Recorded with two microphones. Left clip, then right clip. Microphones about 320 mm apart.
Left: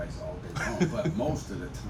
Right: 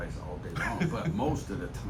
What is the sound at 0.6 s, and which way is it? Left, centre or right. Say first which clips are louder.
Speech: left 2 dB; centre.